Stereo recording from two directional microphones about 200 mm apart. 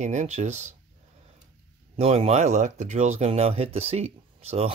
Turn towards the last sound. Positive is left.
turn(degrees=-30)  # may be behind; listen again after turning